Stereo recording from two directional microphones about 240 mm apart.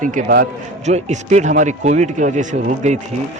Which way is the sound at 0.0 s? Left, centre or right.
Right.